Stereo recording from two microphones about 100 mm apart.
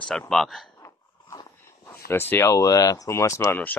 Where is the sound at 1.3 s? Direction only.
45° left (ahead or behind).